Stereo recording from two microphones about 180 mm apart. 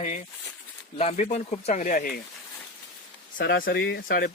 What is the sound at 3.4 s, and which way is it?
Speech, 90° left.